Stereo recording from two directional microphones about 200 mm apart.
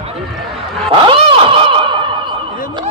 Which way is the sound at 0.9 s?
25° right (ahead or behind).